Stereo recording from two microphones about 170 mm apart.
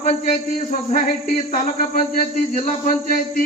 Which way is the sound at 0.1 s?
50° left (ahead or behind).